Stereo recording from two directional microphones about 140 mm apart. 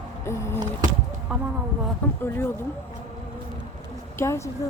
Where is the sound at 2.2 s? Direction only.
15° left (ahead or behind).